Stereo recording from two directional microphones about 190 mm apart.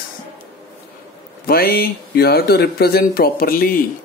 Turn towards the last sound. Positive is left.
turn(degrees=50)  # may be behind; listen again after turning